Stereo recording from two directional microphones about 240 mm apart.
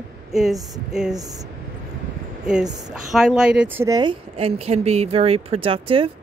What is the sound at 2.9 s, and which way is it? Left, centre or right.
A woman's voice, centre.